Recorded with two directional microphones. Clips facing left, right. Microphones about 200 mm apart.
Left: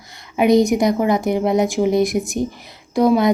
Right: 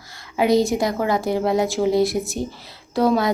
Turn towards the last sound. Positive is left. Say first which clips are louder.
# left 4 dB
turn(degrees=15)  # may be behind; listen again after turning